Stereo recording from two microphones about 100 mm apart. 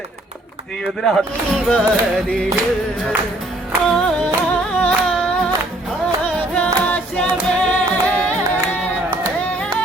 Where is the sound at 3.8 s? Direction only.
5° left (ahead or behind).